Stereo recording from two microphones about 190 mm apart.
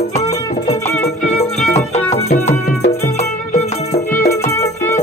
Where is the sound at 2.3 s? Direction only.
35° left (ahead or behind).